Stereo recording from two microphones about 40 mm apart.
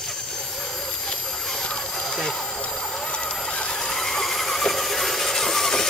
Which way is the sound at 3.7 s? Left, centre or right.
Centre.